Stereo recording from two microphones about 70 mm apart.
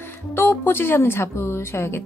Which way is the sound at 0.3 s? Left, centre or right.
Left.